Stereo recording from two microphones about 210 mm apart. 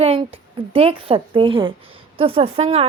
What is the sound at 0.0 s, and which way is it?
A woman's voice, 25° right (ahead or behind).